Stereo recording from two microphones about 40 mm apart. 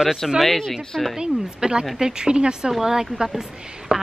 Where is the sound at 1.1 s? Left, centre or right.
Centre.